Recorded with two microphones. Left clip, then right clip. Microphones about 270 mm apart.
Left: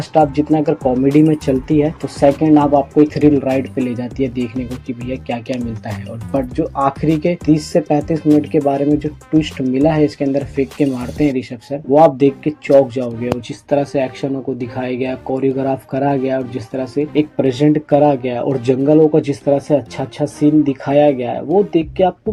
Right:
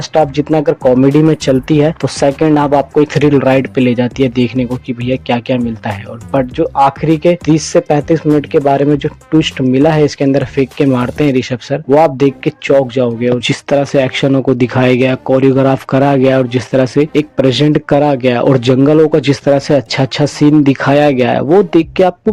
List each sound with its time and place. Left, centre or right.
0.1 s speech: right